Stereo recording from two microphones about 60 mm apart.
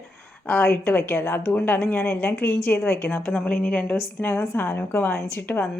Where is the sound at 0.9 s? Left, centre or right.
Left.